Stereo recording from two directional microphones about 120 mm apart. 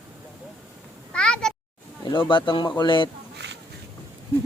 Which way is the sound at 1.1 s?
5° left (ahead or behind).